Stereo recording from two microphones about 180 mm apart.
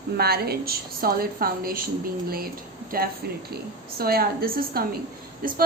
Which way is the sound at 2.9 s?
55° right (ahead or behind).